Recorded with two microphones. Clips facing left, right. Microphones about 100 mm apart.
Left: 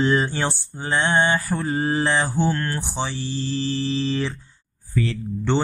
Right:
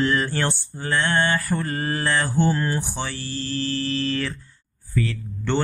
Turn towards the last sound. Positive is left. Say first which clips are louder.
# left 2 dB
turn(degrees=25)  # may be behind; listen again after turning